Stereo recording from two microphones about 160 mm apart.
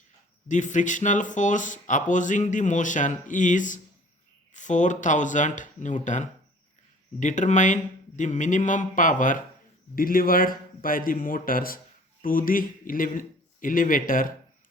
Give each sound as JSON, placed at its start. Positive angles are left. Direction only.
{"t": 0.4, "sound": "a man's voice", "side_deg": 50}